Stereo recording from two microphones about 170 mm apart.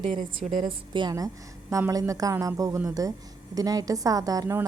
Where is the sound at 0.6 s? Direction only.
25° right (ahead or behind).